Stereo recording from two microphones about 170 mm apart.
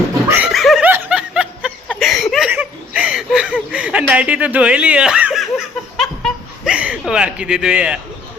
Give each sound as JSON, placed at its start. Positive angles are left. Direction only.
{"t": 0.3, "sound": "laughter", "side_deg": -5}
{"t": 0.9, "sound": "snicker", "side_deg": -10}
{"t": 1.9, "sound": "a sound", "side_deg": 0}